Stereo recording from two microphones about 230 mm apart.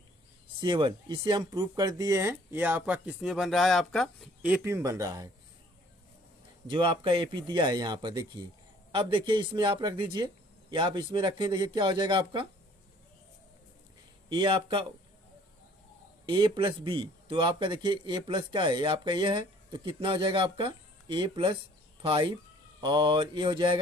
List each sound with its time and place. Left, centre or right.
0.6 s speech: right
6.7 s a man's voice: right
14.3 s a man's voice: right
16.3 s a man's voice: right